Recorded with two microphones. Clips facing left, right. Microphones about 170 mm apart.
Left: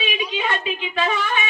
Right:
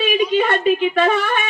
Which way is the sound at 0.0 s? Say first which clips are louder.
Right 9 dB; 45° right (ahead or behind).